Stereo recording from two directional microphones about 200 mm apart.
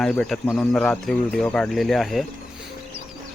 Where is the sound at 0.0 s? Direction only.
5° left (ahead or behind).